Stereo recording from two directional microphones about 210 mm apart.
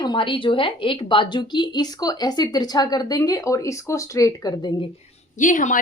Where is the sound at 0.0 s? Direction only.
25° left (ahead or behind).